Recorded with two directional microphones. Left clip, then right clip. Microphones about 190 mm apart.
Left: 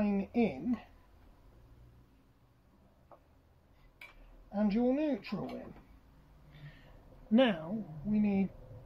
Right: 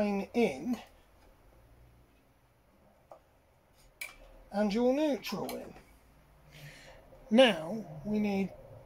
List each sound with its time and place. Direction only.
0.0 s a sound: 25° right (ahead or behind)
4.5 s speech: 20° right (ahead or behind)
7.2 s speech: 25° right (ahead or behind)